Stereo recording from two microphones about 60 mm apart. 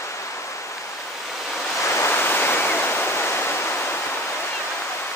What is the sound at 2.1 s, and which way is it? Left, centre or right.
Waves, left.